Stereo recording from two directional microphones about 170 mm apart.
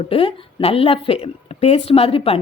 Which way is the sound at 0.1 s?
35° left (ahead or behind).